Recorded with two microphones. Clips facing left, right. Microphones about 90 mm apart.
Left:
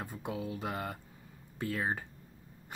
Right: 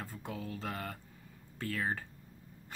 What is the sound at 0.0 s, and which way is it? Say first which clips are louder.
Mantra: left 4 dB; 15° left (ahead or behind).